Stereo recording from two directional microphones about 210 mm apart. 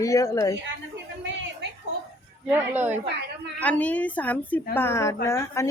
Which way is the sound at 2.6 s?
10° right (ahead or behind).